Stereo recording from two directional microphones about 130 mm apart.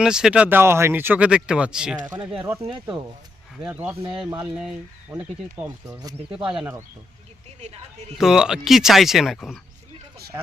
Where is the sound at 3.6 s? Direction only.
10° right (ahead or behind).